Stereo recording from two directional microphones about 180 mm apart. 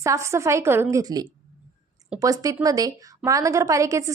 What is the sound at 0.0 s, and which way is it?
A woman's voice, 15° right (ahead or behind).